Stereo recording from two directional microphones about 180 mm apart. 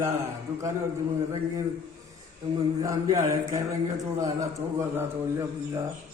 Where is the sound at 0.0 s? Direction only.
15° right (ahead or behind).